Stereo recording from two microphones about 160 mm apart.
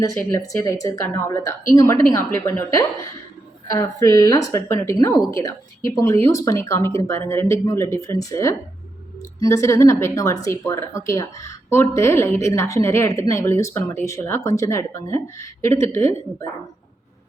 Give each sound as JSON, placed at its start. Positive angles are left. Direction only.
{"t": 0.3, "sound": "a woman's voice", "side_deg": 20}